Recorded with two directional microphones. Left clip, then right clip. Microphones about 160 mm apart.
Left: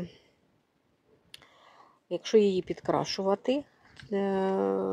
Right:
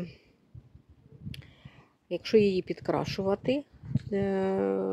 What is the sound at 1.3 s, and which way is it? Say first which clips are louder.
Speech: left 2 dB; 5° right (ahead or behind).